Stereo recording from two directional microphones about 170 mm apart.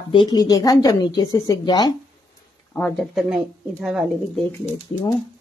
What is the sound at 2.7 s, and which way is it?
Speech, 10° left (ahead or behind).